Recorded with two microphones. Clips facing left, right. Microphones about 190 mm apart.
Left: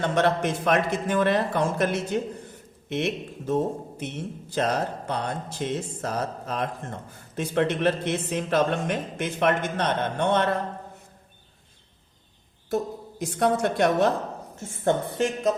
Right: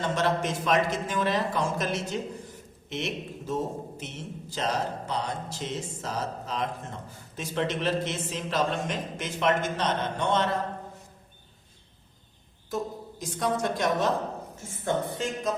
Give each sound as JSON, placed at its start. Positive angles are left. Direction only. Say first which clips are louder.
{"t": 0.0, "sound": "a man's voice", "louder": "left 4 dB", "side_deg": 60}
{"t": 12.7, "sound": "a woman's voice", "louder": "left 5 dB", "side_deg": 60}
{"t": 15.2, "sound": "speech", "louder": "left 6 dB", "side_deg": 65}